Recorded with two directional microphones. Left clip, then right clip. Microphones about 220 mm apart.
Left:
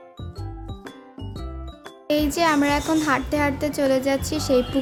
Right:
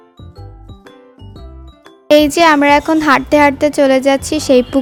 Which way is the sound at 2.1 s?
35° right (ahead or behind).